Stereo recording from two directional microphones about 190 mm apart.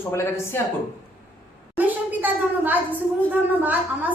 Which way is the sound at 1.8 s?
10° right (ahead or behind).